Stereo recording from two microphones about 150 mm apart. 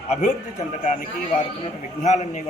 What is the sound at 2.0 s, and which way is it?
Speech, 50° left (ahead or behind).